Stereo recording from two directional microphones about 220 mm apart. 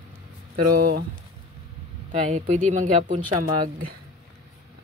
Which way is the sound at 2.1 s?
35° right (ahead or behind).